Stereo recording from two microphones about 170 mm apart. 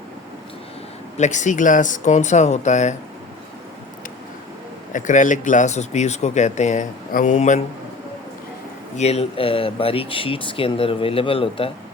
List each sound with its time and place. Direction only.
1.1 s speech: 45° left (ahead or behind)
4.9 s speech: 50° left (ahead or behind)
9.0 s speech: 40° left (ahead or behind)